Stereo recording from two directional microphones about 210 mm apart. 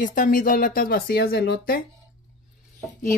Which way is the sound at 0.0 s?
40° left (ahead or behind).